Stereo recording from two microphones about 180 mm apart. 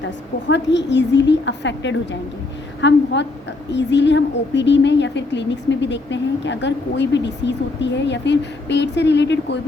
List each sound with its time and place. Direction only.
0.0 s speech: 80° left